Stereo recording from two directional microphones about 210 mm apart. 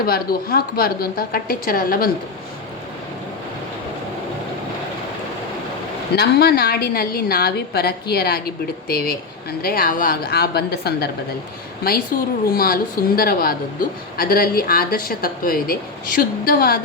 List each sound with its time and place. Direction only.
0.0 s a woman's voice: 45° left (ahead or behind)
6.1 s a woman's voice: 50° left (ahead or behind)
12.1 s a woman's voice: 45° left (ahead or behind)